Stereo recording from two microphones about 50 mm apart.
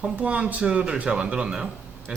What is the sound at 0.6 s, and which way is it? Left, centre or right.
Speech, centre.